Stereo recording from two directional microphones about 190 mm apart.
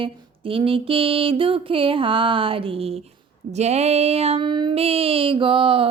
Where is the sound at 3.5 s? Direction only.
35° right (ahead or behind).